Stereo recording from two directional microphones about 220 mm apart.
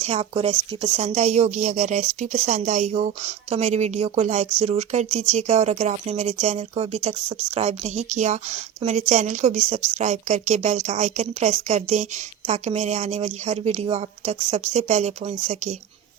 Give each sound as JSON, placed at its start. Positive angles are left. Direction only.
{"t": 0.0, "sound": "a woman's voice", "side_deg": -30}